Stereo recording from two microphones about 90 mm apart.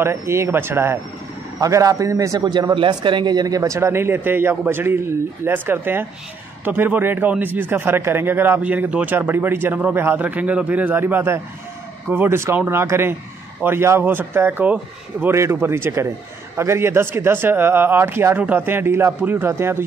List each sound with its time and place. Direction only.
0.0 s a man's voice: 30° right (ahead or behind)
1.6 s a man's voice: 40° right (ahead or behind); by 15.3 s 15° right (ahead or behind)
15.3 s a man's voice: 30° right (ahead or behind)